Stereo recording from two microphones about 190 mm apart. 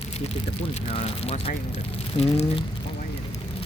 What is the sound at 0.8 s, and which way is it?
Speech, 30° left (ahead or behind).